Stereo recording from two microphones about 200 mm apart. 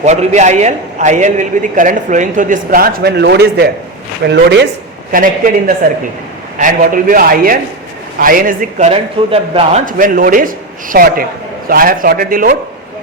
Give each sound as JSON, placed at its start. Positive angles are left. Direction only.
{"t": 0.0, "sound": "a man's voice", "side_deg": -35}
{"t": 5.1, "sound": "speech", "side_deg": -45}
{"t": 8.9, "sound": "a man's voice", "side_deg": -30}
{"t": 9.8, "sound": "speech", "side_deg": -45}